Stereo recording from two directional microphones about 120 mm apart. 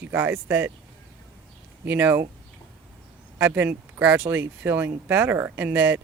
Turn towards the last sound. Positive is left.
turn(degrees=-15)  # may be behind; listen again after turning